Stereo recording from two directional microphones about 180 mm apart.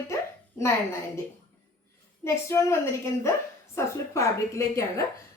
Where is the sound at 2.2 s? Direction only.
15° left (ahead or behind).